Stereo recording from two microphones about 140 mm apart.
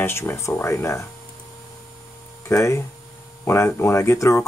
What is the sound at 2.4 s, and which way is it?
Speech, 20° left (ahead or behind).